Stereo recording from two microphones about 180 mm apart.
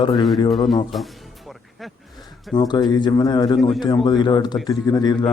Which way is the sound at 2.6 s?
25° left (ahead or behind).